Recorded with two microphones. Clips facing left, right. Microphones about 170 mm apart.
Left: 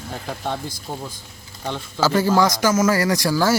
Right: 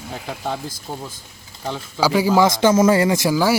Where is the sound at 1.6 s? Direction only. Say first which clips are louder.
Right 1 dB; 5° right (ahead or behind).